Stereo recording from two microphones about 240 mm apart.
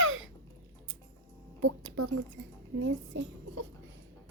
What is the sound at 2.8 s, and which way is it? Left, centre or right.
Speech, right.